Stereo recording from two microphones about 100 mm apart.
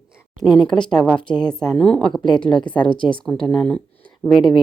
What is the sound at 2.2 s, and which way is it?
Speech, 50° left (ahead or behind).